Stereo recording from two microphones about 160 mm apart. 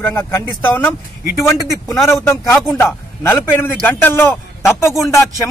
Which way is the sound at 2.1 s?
15° left (ahead or behind).